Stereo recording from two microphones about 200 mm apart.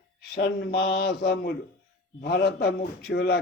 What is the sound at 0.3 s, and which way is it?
A man's voice, 55° left (ahead or behind).